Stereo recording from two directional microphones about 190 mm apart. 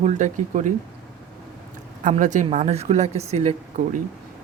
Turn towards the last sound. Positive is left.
turn(degrees=-40)  # may be behind; listen again after turning